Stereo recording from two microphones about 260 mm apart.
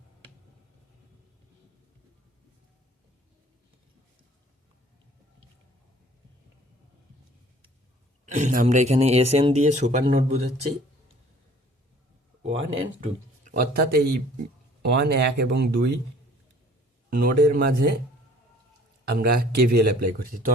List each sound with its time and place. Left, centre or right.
8.3 s speech: right
12.4 s speech: centre
13.5 s speech: right
17.1 s speech: right
19.0 s speech: right